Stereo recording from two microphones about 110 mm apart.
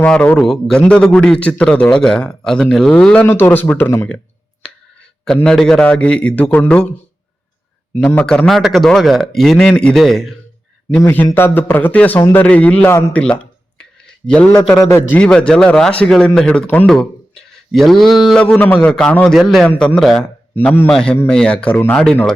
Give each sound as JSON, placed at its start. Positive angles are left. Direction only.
{"t": 0.0, "sound": "a man's voice", "side_deg": 10}
{"t": 3.2, "sound": "speech", "side_deg": 20}
{"t": 4.6, "sound": "a sound", "side_deg": 10}
{"t": 5.5, "sound": "a man's voice", "side_deg": 5}
{"t": 7.9, "sound": "a man's voice", "side_deg": 15}
{"t": 8.4, "sound": "a man's voice", "side_deg": 0}
{"t": 10.9, "sound": "a man's voice", "side_deg": 20}
{"t": 14.3, "sound": "a man's voice", "side_deg": 10}
{"t": 18.4, "sound": "a man's voice", "side_deg": 15}
{"t": 20.9, "sound": "a man's voice", "side_deg": 10}